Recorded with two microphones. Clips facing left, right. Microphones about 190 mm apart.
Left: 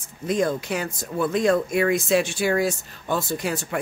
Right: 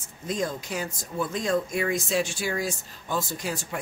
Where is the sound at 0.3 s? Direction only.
65° left (ahead or behind).